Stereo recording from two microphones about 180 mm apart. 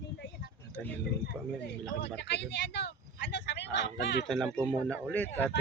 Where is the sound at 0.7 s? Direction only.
10° left (ahead or behind).